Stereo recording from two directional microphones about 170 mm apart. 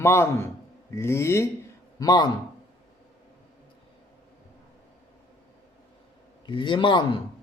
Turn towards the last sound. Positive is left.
turn(degrees=30)  # may be behind; listen again after turning